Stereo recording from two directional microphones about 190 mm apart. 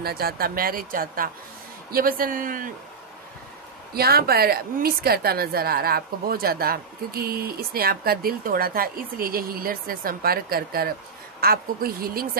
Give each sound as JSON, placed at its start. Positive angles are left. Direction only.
{"t": 0.0, "sound": "a woman's voice", "side_deg": -55}
{"t": 3.9, "sound": "a woman's voice", "side_deg": -55}